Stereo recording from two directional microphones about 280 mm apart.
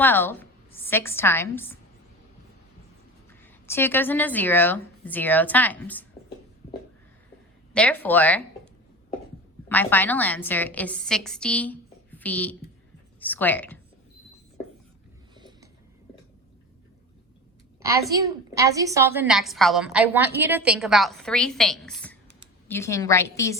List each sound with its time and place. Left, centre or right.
0.0 s a woman's voice: centre
3.4 s a woman's voice: centre
7.7 s a woman's voice: centre
9.6 s a woman's voice: centre
15.4 s a sound: centre
18.1 s a woman's voice: centre